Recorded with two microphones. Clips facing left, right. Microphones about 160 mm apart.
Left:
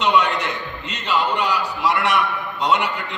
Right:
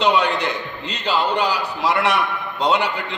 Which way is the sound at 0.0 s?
30° right (ahead or behind).